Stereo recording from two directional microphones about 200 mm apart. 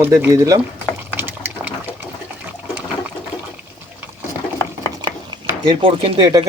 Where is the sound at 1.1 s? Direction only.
10° right (ahead or behind).